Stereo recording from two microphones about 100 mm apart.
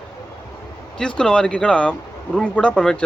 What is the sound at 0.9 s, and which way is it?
Speech, 10° left (ahead or behind).